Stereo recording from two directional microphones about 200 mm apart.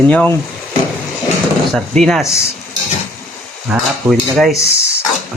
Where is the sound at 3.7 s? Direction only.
Centre (ahead or behind).